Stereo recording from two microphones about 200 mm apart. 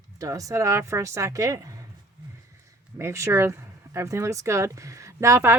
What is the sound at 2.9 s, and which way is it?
Speech, 15° right (ahead or behind).